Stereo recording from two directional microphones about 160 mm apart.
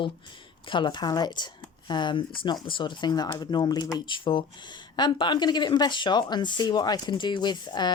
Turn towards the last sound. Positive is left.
turn(degrees=25)  # may be behind; listen again after turning